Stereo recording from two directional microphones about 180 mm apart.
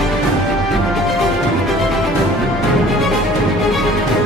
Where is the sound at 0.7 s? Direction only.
Centre (ahead or behind).